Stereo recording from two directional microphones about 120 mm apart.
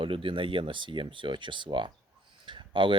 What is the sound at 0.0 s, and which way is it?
Speech, 45° right (ahead or behind).